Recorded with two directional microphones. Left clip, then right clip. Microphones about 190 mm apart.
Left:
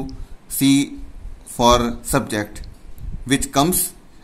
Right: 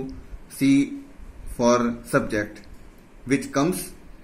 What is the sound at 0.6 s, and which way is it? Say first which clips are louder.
Speech: left 3 dB; 45° left (ahead or behind).